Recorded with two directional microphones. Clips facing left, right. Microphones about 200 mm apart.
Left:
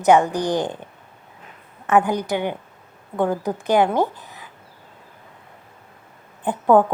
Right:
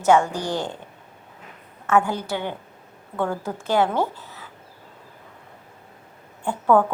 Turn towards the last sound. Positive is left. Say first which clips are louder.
# left 3 dB
turn(degrees=20)  # may be behind; listen again after turning